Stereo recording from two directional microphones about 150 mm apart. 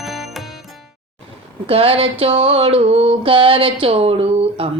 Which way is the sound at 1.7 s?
40° right (ahead or behind).